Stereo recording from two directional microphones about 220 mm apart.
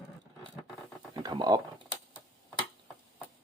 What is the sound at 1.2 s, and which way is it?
Speech, 20° right (ahead or behind).